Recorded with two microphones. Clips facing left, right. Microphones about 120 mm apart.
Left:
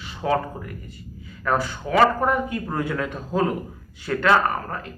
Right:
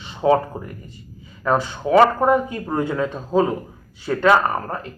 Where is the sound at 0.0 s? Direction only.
25° right (ahead or behind).